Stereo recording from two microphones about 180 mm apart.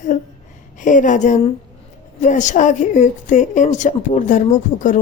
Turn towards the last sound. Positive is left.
turn(degrees=45)  # may be behind; listen again after turning